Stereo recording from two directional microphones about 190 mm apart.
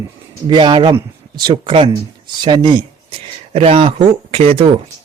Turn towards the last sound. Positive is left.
turn(degrees=-30)  # may be behind; listen again after turning